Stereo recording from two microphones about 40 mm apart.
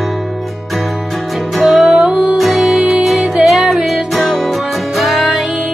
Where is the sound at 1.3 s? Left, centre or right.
Centre.